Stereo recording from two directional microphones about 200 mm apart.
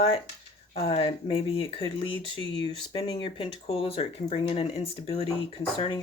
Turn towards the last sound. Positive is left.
turn(degrees=25)  # may be behind; listen again after turning